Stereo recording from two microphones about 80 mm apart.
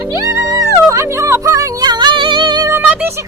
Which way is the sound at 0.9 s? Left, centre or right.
Right.